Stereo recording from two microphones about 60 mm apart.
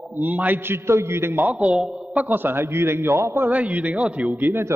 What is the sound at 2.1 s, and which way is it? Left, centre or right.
A man's voice, right.